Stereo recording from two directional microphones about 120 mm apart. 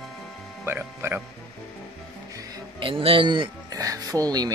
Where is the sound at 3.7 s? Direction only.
30° right (ahead or behind).